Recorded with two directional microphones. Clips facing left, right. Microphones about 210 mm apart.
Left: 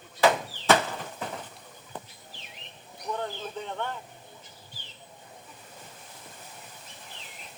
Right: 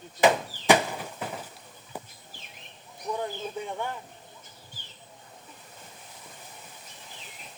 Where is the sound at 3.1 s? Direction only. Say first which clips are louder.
Right 2 dB; 10° right (ahead or behind).